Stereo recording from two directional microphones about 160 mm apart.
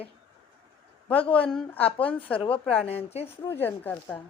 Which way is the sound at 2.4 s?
35° left (ahead or behind).